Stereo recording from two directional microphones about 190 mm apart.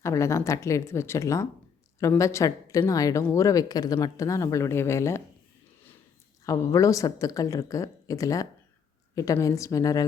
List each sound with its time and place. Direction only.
0.0 s speech: 15° left (ahead or behind)
6.4 s speech: 15° left (ahead or behind)